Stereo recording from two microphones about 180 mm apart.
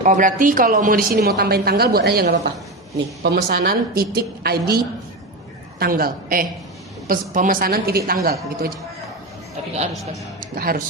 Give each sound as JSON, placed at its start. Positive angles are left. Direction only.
{"t": 0.0, "sound": "a woman's voice", "side_deg": -45}
{"t": 5.8, "sound": "a woman's voice", "side_deg": -55}
{"t": 10.4, "sound": "speech", "side_deg": -55}